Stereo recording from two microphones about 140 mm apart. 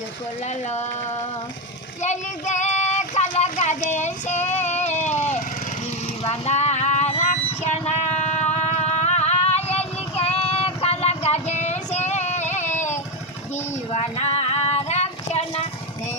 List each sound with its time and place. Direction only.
2.0 s child singing: 60° left (ahead or behind)
6.2 s music: 50° left (ahead or behind)
13.9 s female singing: 50° left (ahead or behind)